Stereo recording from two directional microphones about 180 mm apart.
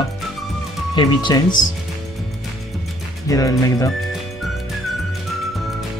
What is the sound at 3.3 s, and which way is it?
Speech, 20° left (ahead or behind).